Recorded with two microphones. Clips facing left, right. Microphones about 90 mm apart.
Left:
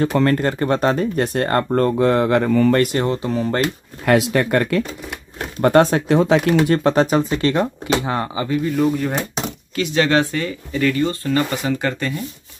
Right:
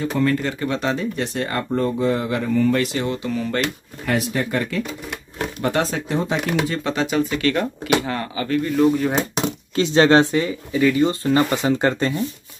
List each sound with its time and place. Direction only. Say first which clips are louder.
0.0 s speech: left 4 dB; 60° left (ahead or behind)
1.9 s speech: left 5 dB; 65° left (ahead or behind)
3.1 s speech: left 3 dB; 35° left (ahead or behind)
4.0 s speech: left 6 dB; 70° left (ahead or behind)
5.6 s speech: left 9 dB; 50° left (ahead or behind)
6.1 s speech: left 7 dB; 90° left
6.7 s speech: left 7 dB; 45° left (ahead or behind); by 8.5 s 25° left (ahead or behind)
8.5 s speech: right 2 dB; 5° left (ahead or behind)
9.8 s speech: right 3 dB; 30° right (ahead or behind)
10.7 s speech: right 1 dB; 10° right (ahead or behind); by 12.2 s 25° right (ahead or behind)